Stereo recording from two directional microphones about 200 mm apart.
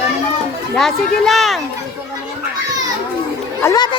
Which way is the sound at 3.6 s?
15° left (ahead or behind).